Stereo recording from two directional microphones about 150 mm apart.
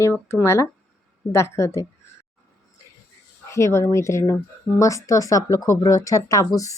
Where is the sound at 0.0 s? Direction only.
15° left (ahead or behind).